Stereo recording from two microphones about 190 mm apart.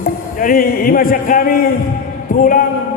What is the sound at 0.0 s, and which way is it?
A man's voice, 50° left (ahead or behind).